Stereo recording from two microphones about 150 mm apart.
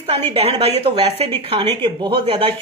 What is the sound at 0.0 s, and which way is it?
Speech, 40° right (ahead or behind).